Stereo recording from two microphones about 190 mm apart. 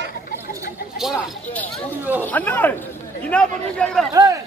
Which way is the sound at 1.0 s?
5° left (ahead or behind).